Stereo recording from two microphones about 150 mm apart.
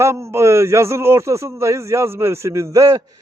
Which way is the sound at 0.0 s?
20° right (ahead or behind).